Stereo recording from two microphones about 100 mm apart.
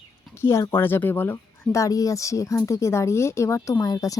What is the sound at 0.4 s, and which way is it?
Speech, 25° left (ahead or behind).